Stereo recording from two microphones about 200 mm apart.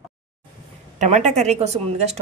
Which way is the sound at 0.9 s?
35° right (ahead or behind).